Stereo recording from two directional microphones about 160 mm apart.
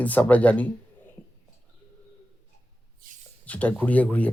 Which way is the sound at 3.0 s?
60° right (ahead or behind).